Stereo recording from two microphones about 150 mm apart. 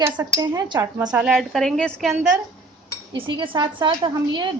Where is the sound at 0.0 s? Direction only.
25° right (ahead or behind).